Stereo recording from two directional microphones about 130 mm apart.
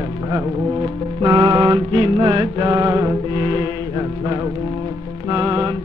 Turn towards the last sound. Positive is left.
turn(degrees=-30)  # may be behind; listen again after turning